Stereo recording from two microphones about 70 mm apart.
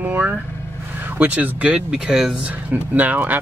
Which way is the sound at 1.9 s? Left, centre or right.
Centre.